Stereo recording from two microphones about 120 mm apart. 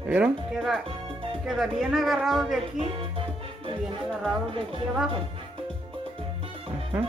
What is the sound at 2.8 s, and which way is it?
Music, 50° right (ahead or behind).